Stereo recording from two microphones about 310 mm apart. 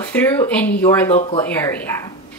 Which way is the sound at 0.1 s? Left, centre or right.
Centre.